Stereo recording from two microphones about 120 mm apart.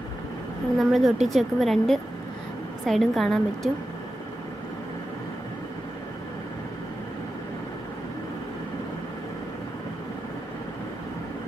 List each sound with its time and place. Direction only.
0.7 s a woman's voice: centre (ahead or behind)